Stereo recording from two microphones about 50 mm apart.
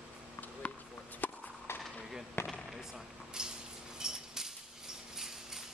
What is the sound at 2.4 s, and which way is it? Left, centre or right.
Fireworks, left.